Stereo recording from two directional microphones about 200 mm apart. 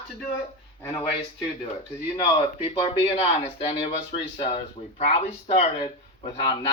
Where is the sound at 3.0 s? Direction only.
30° left (ahead or behind).